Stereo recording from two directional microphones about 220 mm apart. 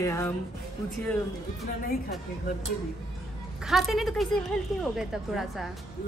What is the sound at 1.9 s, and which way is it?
Speech, 45° left (ahead or behind).